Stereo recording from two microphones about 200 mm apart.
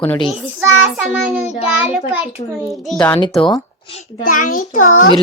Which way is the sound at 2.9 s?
5° left (ahead or behind).